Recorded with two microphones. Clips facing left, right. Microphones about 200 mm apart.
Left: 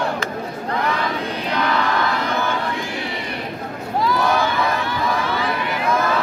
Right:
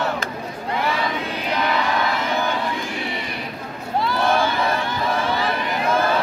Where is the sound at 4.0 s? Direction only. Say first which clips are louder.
Left 2 dB; 25° right (ahead or behind).